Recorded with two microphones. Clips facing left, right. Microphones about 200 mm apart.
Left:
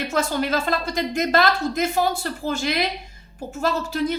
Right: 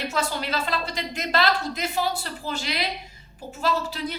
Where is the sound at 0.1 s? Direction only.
45° left (ahead or behind).